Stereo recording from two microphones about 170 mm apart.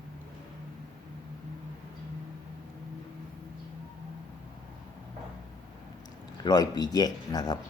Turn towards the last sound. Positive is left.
turn(degrees=25)  # may be behind; listen again after turning